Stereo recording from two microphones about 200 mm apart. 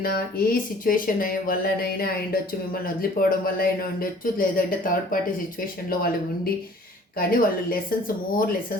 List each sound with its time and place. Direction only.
0.0 s speech: 50° left (ahead or behind)